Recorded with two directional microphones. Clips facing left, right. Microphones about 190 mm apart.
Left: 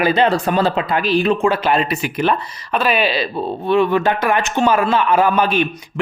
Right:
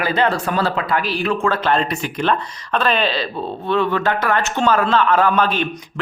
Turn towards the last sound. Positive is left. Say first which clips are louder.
# left 2 dB
turn(degrees=10)  # may be behind; listen again after turning